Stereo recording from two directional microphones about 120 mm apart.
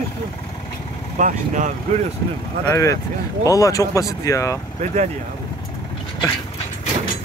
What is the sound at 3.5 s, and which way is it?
Speech, 30° left (ahead or behind).